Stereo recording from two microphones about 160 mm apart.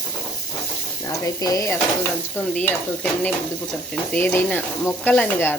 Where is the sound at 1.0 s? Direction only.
20° left (ahead or behind).